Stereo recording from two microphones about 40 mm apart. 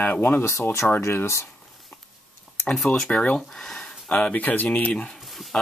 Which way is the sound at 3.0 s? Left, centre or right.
Left.